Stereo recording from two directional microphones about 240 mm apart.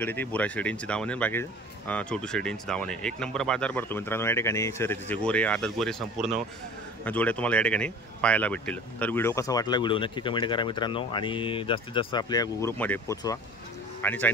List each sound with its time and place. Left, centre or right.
0.0 s speech: centre